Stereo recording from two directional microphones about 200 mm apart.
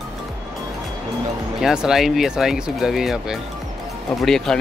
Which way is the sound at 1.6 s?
5° right (ahead or behind).